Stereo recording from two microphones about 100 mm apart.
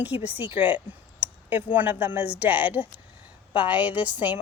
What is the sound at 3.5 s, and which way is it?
Speech, 50° left (ahead or behind).